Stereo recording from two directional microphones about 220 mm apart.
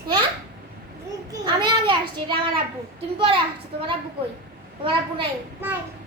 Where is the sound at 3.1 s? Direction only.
25° right (ahead or behind).